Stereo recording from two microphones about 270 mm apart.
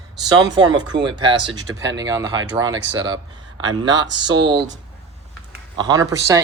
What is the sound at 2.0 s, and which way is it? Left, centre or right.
Speech, centre.